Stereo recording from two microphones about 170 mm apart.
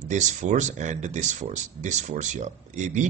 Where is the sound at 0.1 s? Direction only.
45° right (ahead or behind).